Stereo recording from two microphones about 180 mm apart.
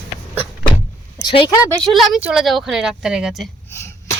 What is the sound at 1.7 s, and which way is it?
Speech, centre (ahead or behind).